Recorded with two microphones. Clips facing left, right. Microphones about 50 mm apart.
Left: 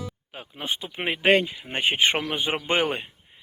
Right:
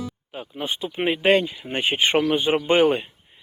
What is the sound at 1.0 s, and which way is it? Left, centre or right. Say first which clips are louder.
Speech: right 2 dB; centre.